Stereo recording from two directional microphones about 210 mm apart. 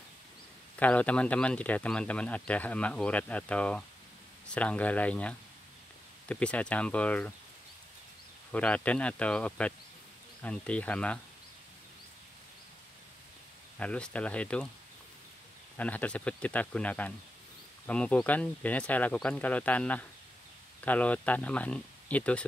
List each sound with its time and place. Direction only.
0.7 s speech: 5° left (ahead or behind)
8.5 s speech: 5° left (ahead or behind)
13.7 s speech: 5° left (ahead or behind)
15.8 s speech: 5° left (ahead or behind)